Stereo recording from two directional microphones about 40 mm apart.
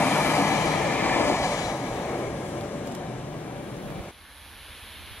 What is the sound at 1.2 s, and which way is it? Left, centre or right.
Train, left.